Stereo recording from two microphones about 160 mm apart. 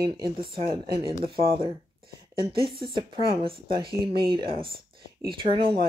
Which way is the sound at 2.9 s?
35° right (ahead or behind).